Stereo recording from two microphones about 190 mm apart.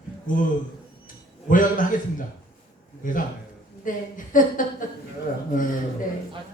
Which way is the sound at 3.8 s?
45° left (ahead or behind).